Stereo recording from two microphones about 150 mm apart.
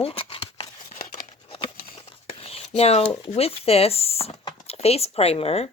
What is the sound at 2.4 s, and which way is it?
Speech, 45° left (ahead or behind).